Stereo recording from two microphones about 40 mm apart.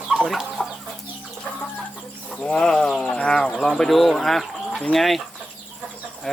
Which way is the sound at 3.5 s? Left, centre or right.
Centre.